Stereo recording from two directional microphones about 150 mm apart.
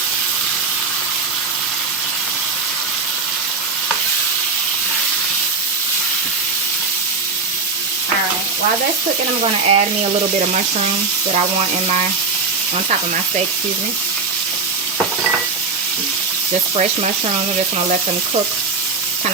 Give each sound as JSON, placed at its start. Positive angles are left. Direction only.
{"t": 9.4, "sound": "speech", "side_deg": -45}